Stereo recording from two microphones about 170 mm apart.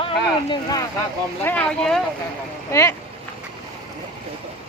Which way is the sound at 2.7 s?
15° left (ahead or behind).